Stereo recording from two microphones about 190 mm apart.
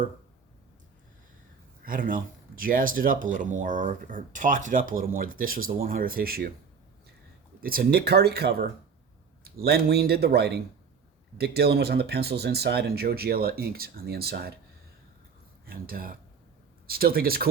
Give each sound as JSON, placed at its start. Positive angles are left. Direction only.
{"t": 1.8, "sound": "speech", "side_deg": -45}
{"t": 7.6, "sound": "speech", "side_deg": -50}
{"t": 9.6, "sound": "speech", "side_deg": -60}
{"t": 15.6, "sound": "speech", "side_deg": -50}